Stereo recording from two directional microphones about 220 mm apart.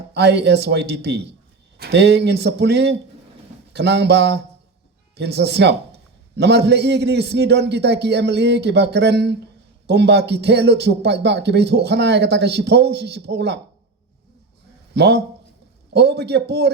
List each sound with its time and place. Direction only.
0.1 s a man's voice: 50° right (ahead or behind)
14.9 s a man's voice: 50° right (ahead or behind)